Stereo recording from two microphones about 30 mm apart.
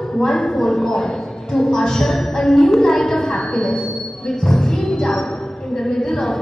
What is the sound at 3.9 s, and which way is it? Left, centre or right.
Music, centre.